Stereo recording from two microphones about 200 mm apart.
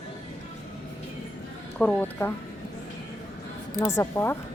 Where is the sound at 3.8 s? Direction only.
15° left (ahead or behind).